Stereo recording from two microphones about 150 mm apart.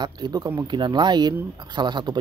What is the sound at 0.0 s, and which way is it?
Speech, 30° right (ahead or behind).